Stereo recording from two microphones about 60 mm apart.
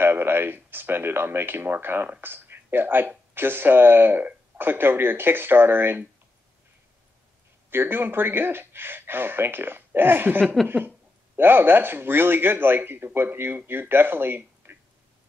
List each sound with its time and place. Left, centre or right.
0.0 s speech: right
7.7 s speech: right
10.4 s a sound: centre
11.3 s speech: right